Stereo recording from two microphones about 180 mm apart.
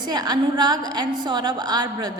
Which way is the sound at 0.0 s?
20° right (ahead or behind).